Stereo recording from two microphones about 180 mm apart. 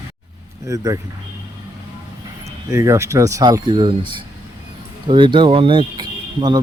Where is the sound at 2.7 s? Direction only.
15° right (ahead or behind).